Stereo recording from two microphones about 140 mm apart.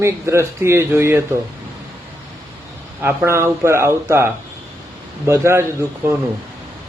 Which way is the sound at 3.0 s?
20° right (ahead or behind).